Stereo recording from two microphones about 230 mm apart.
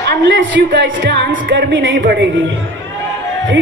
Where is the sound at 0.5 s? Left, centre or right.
Right.